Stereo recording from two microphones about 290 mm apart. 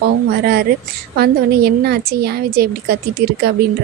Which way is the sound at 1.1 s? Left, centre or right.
Right.